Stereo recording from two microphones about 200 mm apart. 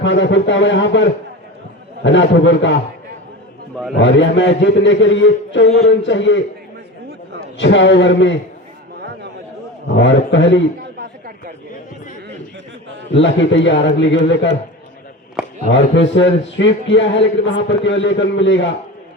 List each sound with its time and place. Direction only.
0.0 s a man's voice: 65° left (ahead or behind)
3.9 s a man's voice: 65° left (ahead or behind)
5.6 s music: 35° left (ahead or behind)
5.9 s a man's voice: 65° left (ahead or behind)
7.6 s a man's voice: 65° left (ahead or behind)
9.9 s a man's voice: 65° left (ahead or behind)
13.1 s a man's voice: 65° left (ahead or behind)
15.4 s a sound: 5° right (ahead or behind)
15.7 s a man's voice: 65° left (ahead or behind)